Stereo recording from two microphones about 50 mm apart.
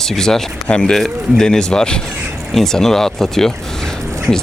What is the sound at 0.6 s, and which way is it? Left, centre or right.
Speech, left.